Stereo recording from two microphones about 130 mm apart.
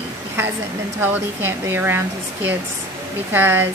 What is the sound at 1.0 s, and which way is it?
Speech, 15° right (ahead or behind).